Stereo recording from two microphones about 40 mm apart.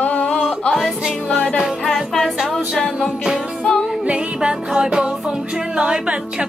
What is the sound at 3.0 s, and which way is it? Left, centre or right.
Music, centre.